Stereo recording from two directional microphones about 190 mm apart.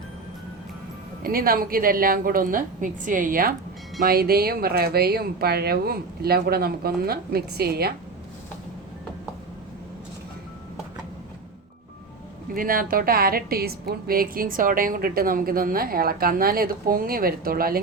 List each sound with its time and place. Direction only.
1.2 s a woman's voice: 50° right (ahead or behind)
12.5 s a woman's voice: 50° right (ahead or behind)